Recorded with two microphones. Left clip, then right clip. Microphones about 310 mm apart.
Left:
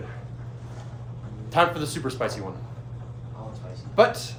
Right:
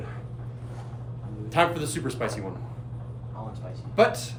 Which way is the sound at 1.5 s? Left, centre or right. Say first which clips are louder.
Left 2 dB; centre.